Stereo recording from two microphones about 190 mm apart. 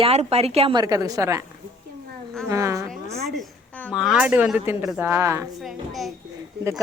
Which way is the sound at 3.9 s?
5° right (ahead or behind).